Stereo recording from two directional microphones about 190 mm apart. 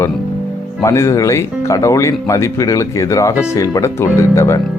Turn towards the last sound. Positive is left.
turn(degrees=15)  # may be behind; listen again after turning